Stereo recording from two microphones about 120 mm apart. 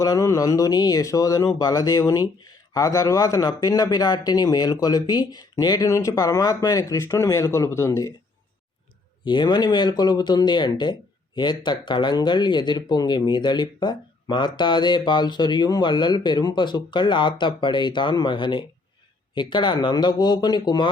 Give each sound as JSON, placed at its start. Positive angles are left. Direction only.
{"t": 0.0, "sound": "speech", "side_deg": 30}
{"t": 9.2, "sound": "speech", "side_deg": 40}